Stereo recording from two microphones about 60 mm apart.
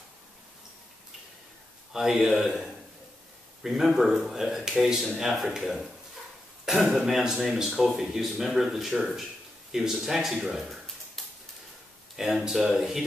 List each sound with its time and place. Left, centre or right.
1.9 s speech: centre